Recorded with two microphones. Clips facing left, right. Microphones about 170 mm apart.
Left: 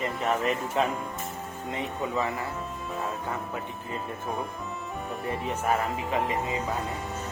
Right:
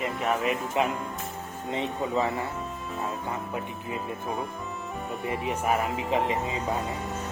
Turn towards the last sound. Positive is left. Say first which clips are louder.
# right 2 dB
turn(degrees=-20)  # may be behind; listen again after turning